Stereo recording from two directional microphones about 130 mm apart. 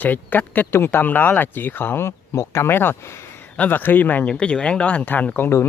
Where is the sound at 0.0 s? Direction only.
15° left (ahead or behind).